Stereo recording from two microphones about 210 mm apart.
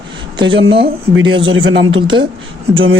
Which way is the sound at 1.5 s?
65° right (ahead or behind).